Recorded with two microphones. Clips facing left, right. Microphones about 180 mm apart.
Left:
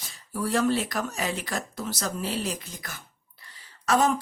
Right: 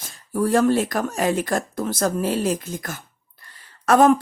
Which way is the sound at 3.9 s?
55° right (ahead or behind).